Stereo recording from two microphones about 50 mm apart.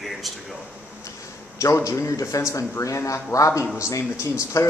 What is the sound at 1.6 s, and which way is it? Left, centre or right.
Speech, left.